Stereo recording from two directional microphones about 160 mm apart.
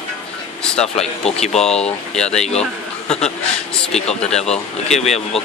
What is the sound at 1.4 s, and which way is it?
A man's voice, 5° left (ahead or behind).